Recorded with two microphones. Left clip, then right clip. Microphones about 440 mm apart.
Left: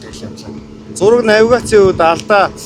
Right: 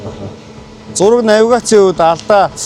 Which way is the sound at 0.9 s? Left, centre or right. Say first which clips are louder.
Even; right.